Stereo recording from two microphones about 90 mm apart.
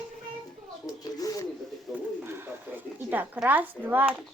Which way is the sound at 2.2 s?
25° right (ahead or behind).